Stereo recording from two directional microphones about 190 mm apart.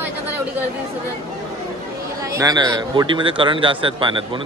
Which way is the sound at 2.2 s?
15° right (ahead or behind).